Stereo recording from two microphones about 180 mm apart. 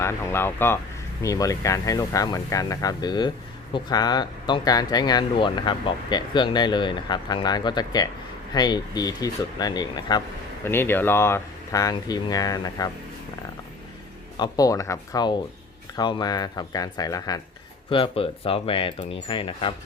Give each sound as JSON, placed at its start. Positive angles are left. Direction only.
{"t": 0.0, "sound": "speech", "side_deg": 15}
{"t": 10.7, "sound": "speech", "side_deg": 10}
{"t": 14.3, "sound": "speech", "side_deg": 20}
{"t": 17.8, "sound": "speech", "side_deg": 30}